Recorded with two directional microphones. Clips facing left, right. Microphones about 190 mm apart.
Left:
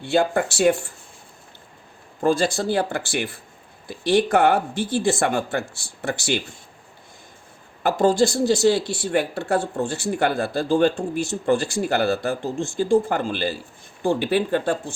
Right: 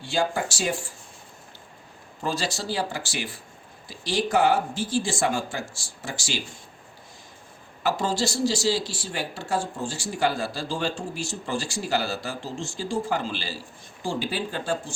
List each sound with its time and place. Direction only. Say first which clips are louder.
0.0 s speech: left 6 dB; 60° left (ahead or behind)
2.2 s speech: left 9 dB; 50° left (ahead or behind)
7.9 s speech: left 7 dB; 55° left (ahead or behind)